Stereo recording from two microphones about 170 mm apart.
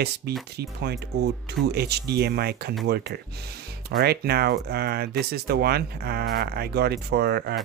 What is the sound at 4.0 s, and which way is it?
Speech, 70° right (ahead or behind).